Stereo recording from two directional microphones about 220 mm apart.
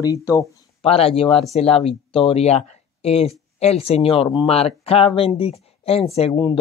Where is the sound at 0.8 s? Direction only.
25° left (ahead or behind).